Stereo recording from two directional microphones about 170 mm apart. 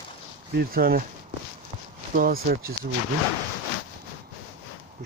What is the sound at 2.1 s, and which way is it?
Speech, 60° right (ahead or behind).